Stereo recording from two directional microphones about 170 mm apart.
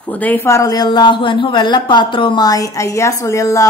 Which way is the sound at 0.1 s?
10° left (ahead or behind).